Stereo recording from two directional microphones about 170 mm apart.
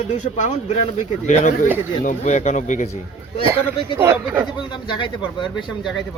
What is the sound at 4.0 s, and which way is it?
Speech, 15° right (ahead or behind).